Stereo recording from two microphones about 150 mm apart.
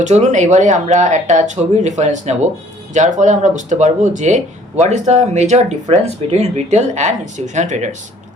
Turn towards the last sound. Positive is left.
turn(degrees=-55)  # may be behind; listen again after turning